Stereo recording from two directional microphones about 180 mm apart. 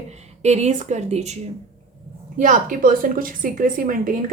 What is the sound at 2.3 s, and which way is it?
A woman's voice, 50° right (ahead or behind).